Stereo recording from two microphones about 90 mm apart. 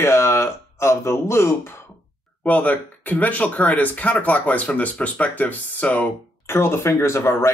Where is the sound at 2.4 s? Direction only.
20° left (ahead or behind).